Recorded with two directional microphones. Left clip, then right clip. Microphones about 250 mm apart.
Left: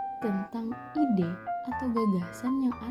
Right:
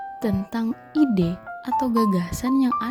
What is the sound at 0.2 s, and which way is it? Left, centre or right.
A child's voice, right.